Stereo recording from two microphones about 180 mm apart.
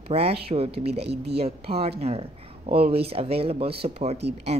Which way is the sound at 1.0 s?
65° right (ahead or behind).